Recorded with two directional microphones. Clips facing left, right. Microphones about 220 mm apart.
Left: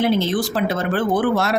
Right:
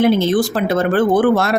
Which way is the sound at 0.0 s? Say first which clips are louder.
Right 5 dB; 50° right (ahead or behind).